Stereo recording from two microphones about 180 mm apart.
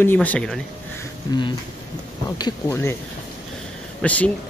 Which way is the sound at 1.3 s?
20° left (ahead or behind).